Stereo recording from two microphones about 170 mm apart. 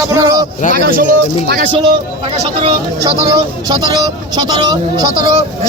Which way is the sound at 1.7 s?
30° right (ahead or behind).